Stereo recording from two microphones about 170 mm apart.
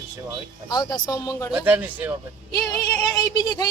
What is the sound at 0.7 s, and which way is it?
Speech, 25° left (ahead or behind).